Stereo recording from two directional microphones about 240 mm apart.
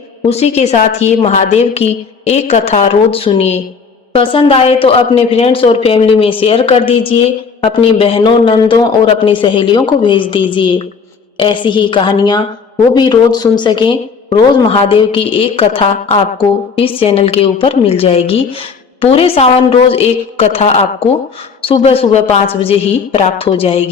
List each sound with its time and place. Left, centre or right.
0.3 s a woman's voice: left